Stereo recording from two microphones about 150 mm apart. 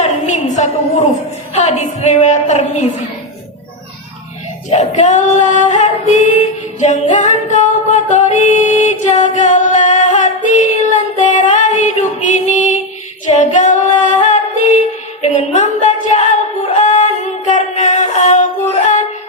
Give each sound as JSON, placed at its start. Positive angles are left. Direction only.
{"t": 0.0, "sound": "a sound", "side_deg": 50}
{"t": 1.5, "sound": "female singing", "side_deg": 45}
{"t": 4.7, "sound": "female singing", "side_deg": 50}
{"t": 6.7, "sound": "music", "side_deg": 50}
{"t": 13.3, "sound": "female singing", "side_deg": 55}
{"t": 15.2, "sound": "a sound", "side_deg": 50}
{"t": 16.8, "sound": "music", "side_deg": 55}